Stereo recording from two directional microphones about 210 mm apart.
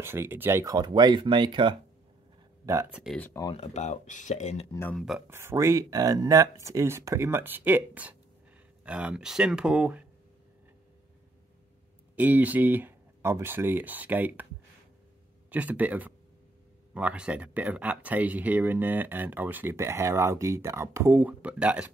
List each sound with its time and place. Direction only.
0.0 s speech: 10° right (ahead or behind)
2.6 s speech: 10° right (ahead or behind); by 3.3 s 5° left (ahead or behind)
3.3 s speech: 25° left (ahead or behind)
4.7 s speech: 10° left (ahead or behind)
5.0 s speech: centre (ahead or behind)
5.4 s speech: 10° right (ahead or behind)
12.2 s speech: 10° right (ahead or behind)
15.5 s speech: 5° right (ahead or behind)